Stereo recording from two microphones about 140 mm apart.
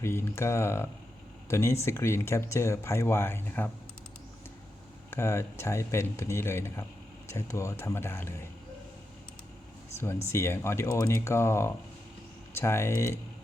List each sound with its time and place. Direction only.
0.0 s speech: 15° left (ahead or behind)
5.1 s speech: 20° left (ahead or behind)
10.3 s speech: 20° left (ahead or behind)